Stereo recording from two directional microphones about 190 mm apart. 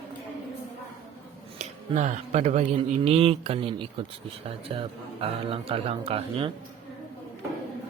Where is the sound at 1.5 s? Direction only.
40° right (ahead or behind).